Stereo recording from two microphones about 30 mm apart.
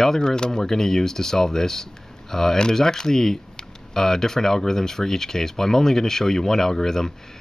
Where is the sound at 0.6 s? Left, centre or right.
Centre.